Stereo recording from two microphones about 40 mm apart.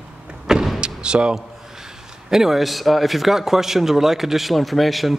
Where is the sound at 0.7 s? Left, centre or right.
Right.